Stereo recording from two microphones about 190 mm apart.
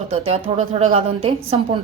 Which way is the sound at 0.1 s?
30° right (ahead or behind).